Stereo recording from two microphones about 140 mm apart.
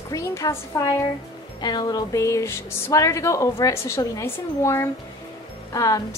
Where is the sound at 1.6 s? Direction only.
30° left (ahead or behind).